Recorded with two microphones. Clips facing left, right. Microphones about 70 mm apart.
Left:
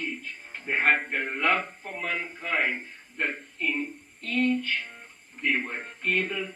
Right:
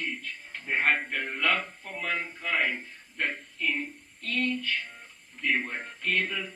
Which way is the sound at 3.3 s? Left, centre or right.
Centre.